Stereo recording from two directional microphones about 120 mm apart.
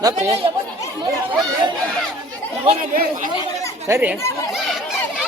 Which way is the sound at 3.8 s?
20° right (ahead or behind).